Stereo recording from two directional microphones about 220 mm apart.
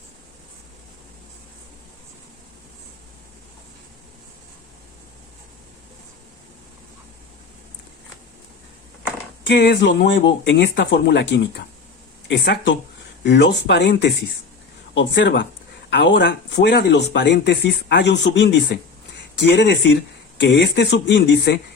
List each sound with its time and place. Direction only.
9.5 s speech: 50° left (ahead or behind)